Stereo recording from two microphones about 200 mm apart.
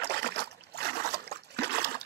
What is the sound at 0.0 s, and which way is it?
Trickle, 55° right (ahead or behind).